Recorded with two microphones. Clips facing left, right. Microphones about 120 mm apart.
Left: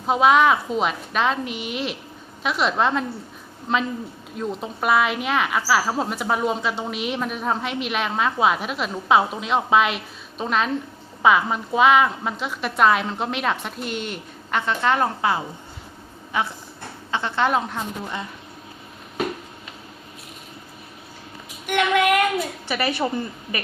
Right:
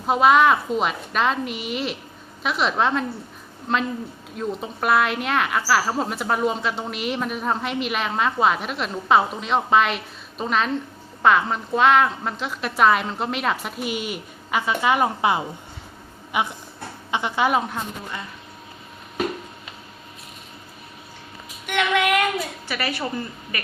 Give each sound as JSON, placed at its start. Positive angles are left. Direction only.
{"t": 0.1, "sound": "a woman's voice", "side_deg": 0}
{"t": 21.7, "sound": "speech", "side_deg": 45}
{"t": 22.7, "sound": "a woman's voice", "side_deg": 20}